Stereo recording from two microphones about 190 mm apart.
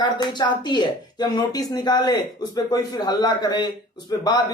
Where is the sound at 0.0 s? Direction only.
25° left (ahead or behind).